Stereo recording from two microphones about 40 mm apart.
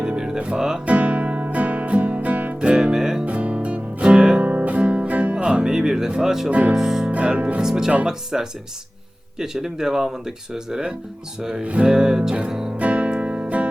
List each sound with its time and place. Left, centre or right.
0.3 s speech: right
0.9 s music: right
2.6 s music: right
2.9 s music: centre
3.2 s music: right
4.4 s music: right; by 6.1 s centre
6.1 s speech: centre
6.5 s speech: right
6.7 s speech: centre
7.3 s speech: right
7.6 s speech: centre
12.5 s music: centre
12.7 s music: right